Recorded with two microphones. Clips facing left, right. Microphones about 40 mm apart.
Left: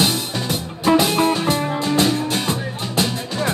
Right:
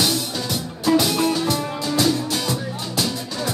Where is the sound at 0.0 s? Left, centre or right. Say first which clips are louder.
Left 2 dB; left.